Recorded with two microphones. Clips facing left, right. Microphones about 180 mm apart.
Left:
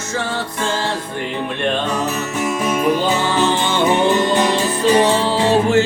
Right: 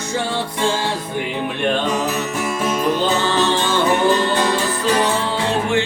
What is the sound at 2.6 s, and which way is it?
Music, 10° left (ahead or behind).